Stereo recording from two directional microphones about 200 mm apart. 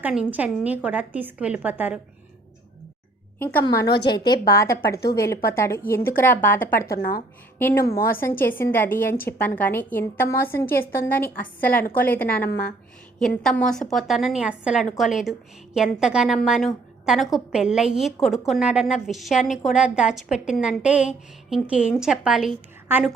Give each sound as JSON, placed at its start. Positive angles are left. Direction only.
{"t": 0.0, "sound": "a woman's voice", "side_deg": -5}
{"t": 3.3, "sound": "a woman's voice", "side_deg": 10}
{"t": 7.9, "sound": "a woman's voice", "side_deg": 45}
{"t": 8.2, "sound": "a woman's voice", "side_deg": 10}